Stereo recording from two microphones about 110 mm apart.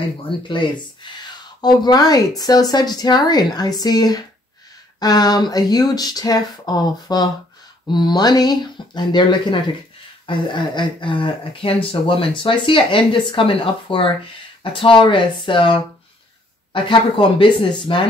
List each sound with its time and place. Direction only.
0.2 s speech: 50° left (ahead or behind)